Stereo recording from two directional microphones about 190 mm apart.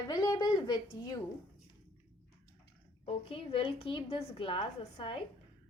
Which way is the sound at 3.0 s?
30° left (ahead or behind).